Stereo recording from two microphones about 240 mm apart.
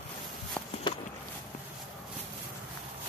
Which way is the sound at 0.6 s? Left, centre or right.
Centre.